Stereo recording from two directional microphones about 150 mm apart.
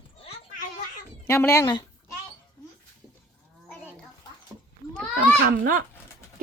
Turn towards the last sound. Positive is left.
turn(degrees=-75)  # may be behind; listen again after turning